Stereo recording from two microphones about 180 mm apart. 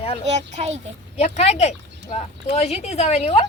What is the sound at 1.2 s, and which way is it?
Speech, 40° left (ahead or behind).